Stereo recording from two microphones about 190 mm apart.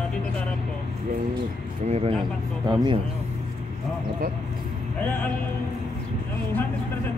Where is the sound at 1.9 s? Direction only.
30° right (ahead or behind).